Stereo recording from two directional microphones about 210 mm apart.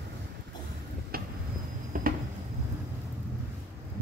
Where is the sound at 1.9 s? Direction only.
40° right (ahead or behind).